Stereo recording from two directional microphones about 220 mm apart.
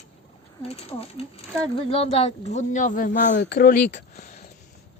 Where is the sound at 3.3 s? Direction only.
50° left (ahead or behind); by 4.5 s 30° left (ahead or behind).